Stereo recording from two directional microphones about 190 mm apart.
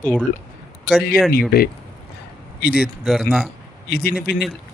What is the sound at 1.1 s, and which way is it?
Speech, 50° left (ahead or behind).